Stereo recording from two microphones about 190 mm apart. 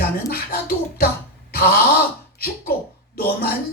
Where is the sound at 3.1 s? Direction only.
55° left (ahead or behind).